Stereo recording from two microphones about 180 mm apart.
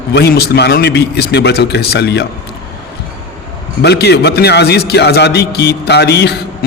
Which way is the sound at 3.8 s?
65° left (ahead or behind).